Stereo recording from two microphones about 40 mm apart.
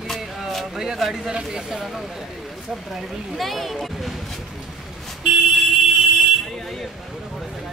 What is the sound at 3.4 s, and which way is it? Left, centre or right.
Speech, centre.